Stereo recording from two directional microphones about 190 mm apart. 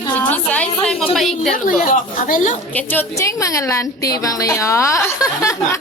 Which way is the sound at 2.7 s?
10° left (ahead or behind).